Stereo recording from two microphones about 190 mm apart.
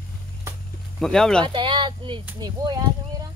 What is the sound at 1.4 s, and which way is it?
Speech, 25° right (ahead or behind).